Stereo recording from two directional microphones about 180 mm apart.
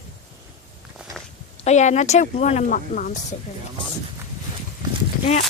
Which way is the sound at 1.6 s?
40° left (ahead or behind).